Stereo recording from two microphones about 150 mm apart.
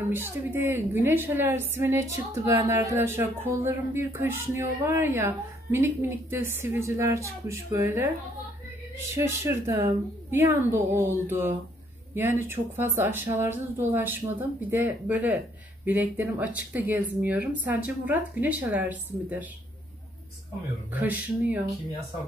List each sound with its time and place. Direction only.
0.1 s a woman's voice: 15° right (ahead or behind)
9.1 s a woman's voice: 20° right (ahead or behind)
20.9 s a woman's voice: 10° right (ahead or behind)